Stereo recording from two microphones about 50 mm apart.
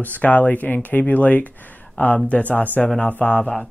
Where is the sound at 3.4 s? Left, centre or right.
Centre.